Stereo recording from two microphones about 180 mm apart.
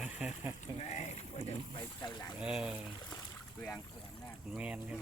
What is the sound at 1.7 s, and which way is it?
Speech, 25° left (ahead or behind).